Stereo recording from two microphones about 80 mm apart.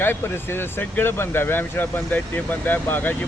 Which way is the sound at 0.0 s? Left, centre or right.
Left.